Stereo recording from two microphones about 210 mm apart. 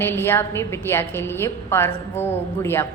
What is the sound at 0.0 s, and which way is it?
A woman's voice, 10° left (ahead or behind).